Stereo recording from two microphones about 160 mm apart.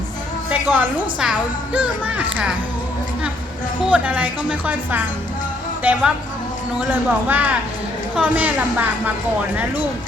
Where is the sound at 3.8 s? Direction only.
10° right (ahead or behind).